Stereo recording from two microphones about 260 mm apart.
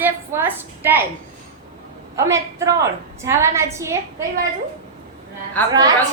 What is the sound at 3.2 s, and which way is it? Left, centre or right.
Speech, centre.